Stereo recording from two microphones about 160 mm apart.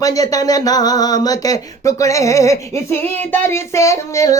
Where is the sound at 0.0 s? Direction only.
20° left (ahead or behind).